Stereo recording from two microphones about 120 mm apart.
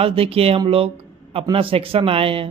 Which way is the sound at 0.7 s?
50° right (ahead or behind).